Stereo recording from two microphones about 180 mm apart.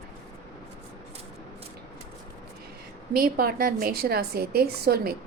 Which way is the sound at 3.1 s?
60° right (ahead or behind).